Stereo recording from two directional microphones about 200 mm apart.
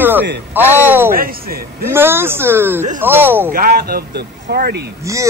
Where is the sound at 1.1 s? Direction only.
45° right (ahead or behind).